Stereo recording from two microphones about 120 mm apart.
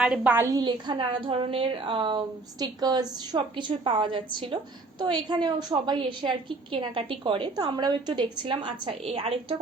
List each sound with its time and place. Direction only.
0.0 s a woman's voice: 5° right (ahead or behind)
0.4 s a woman's voice: 35° right (ahead or behind)
9.0 s a woman's voice: 55° right (ahead or behind)